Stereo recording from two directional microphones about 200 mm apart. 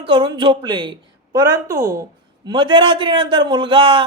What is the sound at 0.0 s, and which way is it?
A man's voice, 25° right (ahead or behind).